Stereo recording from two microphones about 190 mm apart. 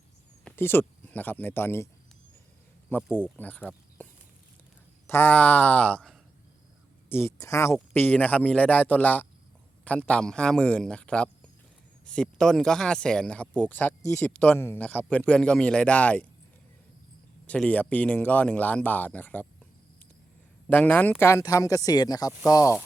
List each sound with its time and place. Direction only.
0.4 s speech: 10° left (ahead or behind)
2.9 s speech: 10° left (ahead or behind)
3.6 s a sound: 5° left (ahead or behind)
5.0 s speech: 10° left (ahead or behind)
17.4 s speech: 5° left (ahead or behind)
20.7 s speech: 10° left (ahead or behind)